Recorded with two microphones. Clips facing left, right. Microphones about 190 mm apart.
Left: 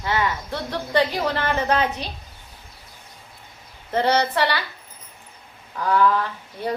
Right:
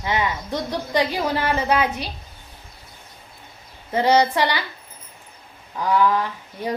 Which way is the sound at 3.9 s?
10° right (ahead or behind).